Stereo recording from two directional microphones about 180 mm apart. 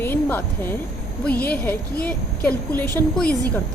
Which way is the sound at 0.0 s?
10° left (ahead or behind).